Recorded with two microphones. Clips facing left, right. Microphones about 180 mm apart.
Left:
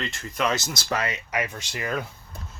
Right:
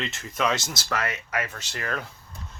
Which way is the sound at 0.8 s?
20° left (ahead or behind).